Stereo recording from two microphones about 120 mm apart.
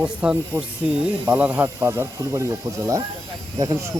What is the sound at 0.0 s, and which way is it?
Speech, 10° right (ahead or behind).